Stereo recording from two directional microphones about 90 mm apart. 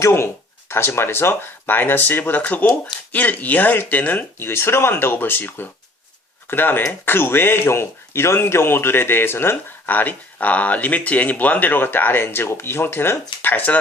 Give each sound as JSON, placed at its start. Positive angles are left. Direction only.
{"t": 0.0, "sound": "speech", "side_deg": 30}